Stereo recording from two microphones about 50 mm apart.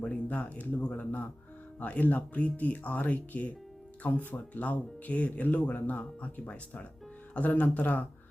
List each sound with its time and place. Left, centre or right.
0.1 s speech: left